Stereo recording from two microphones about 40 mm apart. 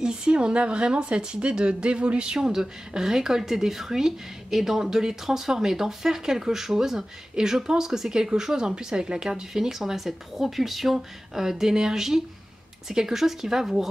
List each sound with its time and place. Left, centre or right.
0.0 s speech: centre